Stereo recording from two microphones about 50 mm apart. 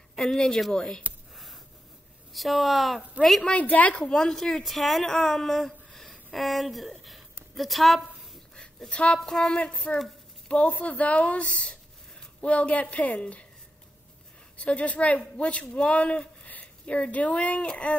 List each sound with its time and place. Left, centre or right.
0.1 s speech: centre
1.3 s a sound: centre
2.3 s speech: centre
3.4 s speech: left
4.1 s speech: centre
8.5 s a woman's voice: centre
9.2 s a sound: centre
10.5 s speech: left
14.6 s speech: left